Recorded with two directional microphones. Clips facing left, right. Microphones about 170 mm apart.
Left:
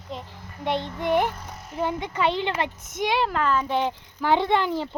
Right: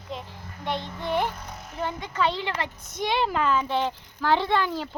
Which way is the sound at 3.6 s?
15° left (ahead or behind).